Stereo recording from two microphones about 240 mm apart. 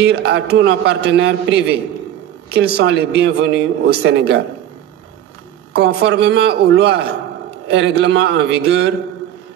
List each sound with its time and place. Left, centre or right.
0.0 s speech: right
5.8 s speech: right